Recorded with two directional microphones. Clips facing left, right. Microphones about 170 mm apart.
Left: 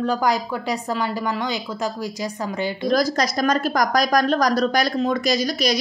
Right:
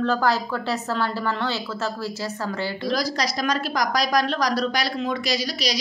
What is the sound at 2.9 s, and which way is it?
A woman's voice, 50° left (ahead or behind).